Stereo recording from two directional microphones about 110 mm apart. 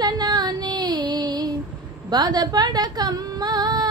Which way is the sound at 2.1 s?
40° right (ahead or behind).